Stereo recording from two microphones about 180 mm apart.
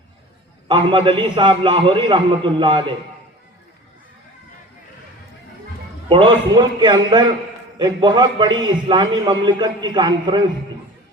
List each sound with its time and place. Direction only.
0.7 s a man's voice: 25° right (ahead or behind)
6.1 s a man's voice: 30° right (ahead or behind)